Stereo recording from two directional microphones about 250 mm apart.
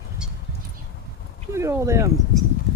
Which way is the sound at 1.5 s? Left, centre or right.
Centre.